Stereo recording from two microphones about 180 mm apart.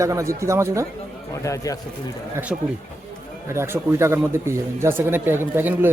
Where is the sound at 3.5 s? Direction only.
15° right (ahead or behind).